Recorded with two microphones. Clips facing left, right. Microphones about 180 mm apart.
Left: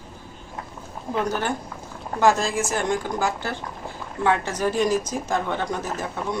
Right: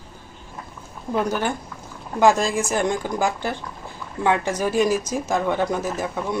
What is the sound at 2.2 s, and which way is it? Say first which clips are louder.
Speech: right 2 dB; 15° right (ahead or behind).